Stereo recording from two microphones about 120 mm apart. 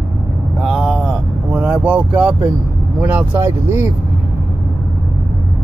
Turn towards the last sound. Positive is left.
turn(degrees=-20)  # may be behind; listen again after turning